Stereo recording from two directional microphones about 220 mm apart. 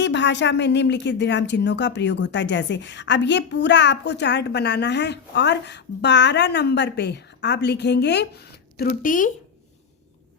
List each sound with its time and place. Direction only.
0.0 s speech: 55° left (ahead or behind)
8.8 s speech: 40° left (ahead or behind)